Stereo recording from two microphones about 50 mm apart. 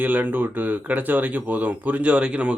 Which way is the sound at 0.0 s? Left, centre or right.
Right.